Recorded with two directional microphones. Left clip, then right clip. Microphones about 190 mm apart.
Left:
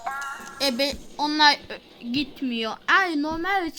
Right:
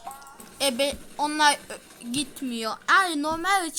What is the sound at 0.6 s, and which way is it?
A woman's voice, centre (ahead or behind).